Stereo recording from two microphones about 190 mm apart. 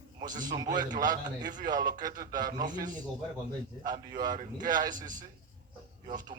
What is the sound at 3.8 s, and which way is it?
A man's voice, 20° right (ahead or behind).